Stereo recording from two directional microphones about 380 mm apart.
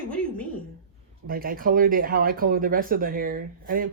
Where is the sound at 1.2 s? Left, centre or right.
Right.